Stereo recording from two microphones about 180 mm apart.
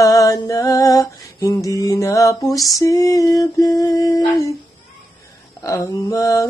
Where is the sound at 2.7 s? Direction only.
20° left (ahead or behind).